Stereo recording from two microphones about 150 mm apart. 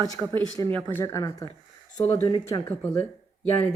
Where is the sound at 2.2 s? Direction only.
30° left (ahead or behind).